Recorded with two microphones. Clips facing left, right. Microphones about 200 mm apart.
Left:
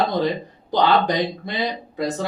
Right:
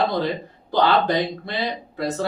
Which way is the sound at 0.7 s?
15° left (ahead or behind).